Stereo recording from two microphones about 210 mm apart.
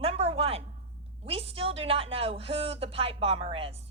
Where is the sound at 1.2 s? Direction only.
25° right (ahead or behind).